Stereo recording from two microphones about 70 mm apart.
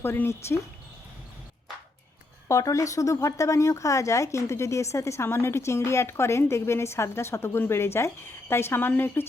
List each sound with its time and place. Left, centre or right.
0.0 s speech: left
2.5 s a woman's voice: left